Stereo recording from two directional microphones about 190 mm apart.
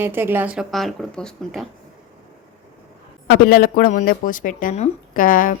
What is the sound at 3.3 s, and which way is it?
Speech, 50° left (ahead or behind).